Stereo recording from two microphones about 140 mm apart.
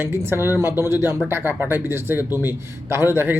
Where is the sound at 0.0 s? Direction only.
15° right (ahead or behind).